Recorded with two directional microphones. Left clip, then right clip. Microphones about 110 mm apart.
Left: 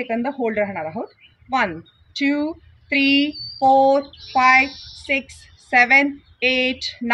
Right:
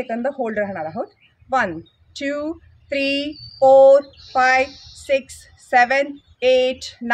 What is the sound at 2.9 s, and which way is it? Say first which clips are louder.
Speech: left 4 dB; 35° right (ahead or behind).